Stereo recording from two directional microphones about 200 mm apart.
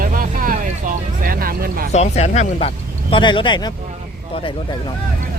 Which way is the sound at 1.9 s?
35° left (ahead or behind).